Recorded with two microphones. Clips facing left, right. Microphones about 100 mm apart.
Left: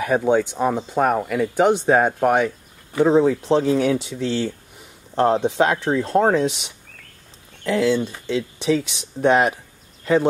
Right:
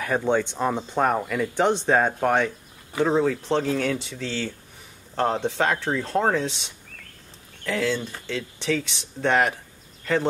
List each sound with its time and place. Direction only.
0.0 s speech: 10° left (ahead or behind)